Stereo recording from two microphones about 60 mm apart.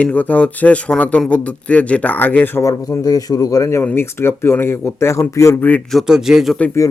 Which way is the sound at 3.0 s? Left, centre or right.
Left.